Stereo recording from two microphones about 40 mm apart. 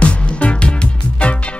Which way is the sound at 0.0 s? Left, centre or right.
Left.